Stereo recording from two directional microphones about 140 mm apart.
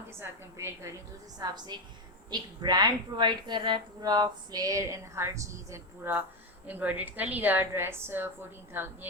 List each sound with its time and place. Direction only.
0.2 s a woman's voice: 20° right (ahead or behind)